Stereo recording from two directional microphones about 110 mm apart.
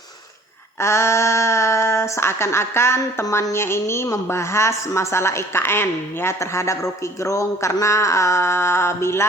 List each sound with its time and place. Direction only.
0.8 s speech: 25° left (ahead or behind)